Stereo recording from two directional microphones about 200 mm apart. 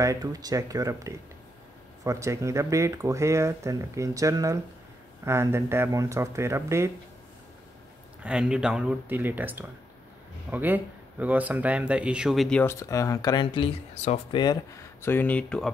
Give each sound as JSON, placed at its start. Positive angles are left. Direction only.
{"t": 0.0, "sound": "speech", "side_deg": -15}
{"t": 8.2, "sound": "speech", "side_deg": -5}